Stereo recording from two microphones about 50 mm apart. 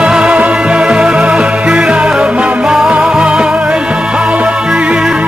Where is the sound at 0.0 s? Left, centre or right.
Centre.